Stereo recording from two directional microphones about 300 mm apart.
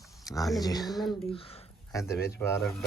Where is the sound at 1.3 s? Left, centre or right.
Centre.